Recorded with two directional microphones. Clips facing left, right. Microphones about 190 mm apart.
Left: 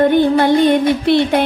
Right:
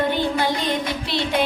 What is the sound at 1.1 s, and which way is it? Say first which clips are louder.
Music: left 9 dB; 55° left (ahead or behind).